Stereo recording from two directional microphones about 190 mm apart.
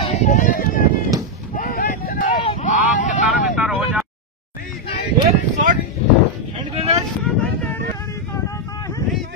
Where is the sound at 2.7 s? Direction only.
45° left (ahead or behind).